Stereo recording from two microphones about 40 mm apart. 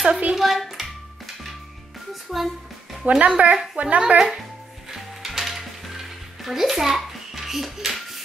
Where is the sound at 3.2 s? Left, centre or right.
Right.